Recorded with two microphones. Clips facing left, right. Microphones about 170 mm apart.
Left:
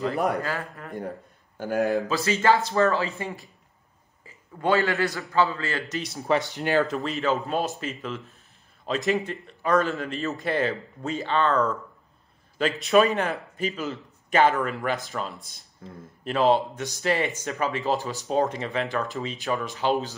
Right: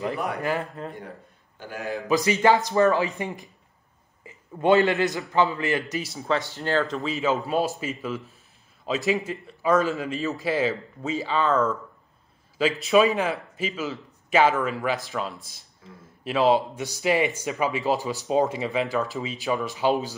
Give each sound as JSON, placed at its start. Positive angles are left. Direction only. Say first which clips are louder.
{"t": 0.1, "sound": "a man's voice", "louder": "left 4 dB", "side_deg": 40}
{"t": 0.4, "sound": "a man's voice", "louder": "right 4 dB", "side_deg": -20}
{"t": 1.6, "sound": "speech", "louder": "left 8 dB", "side_deg": 45}
{"t": 2.0, "sound": "a man's voice", "louder": "right 2 dB", "side_deg": -15}
{"t": 6.2, "sound": "speech", "louder": "left 3 dB", "side_deg": 15}
{"t": 7.0, "sound": "a man's voice", "louder": "right 1 dB", "side_deg": 0}